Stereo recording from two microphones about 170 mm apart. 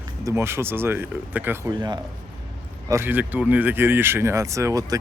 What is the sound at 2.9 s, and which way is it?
Speech, 15° right (ahead or behind).